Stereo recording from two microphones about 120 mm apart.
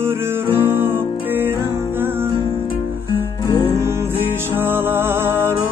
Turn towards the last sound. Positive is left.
turn(degrees=-20)  # may be behind; listen again after turning